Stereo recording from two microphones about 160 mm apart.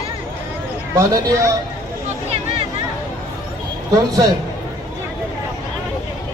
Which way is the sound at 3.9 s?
20° right (ahead or behind).